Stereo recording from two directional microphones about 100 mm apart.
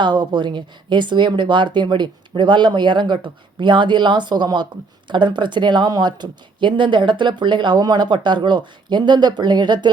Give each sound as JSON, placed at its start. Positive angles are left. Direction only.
{"t": 0.0, "sound": "speech", "side_deg": -50}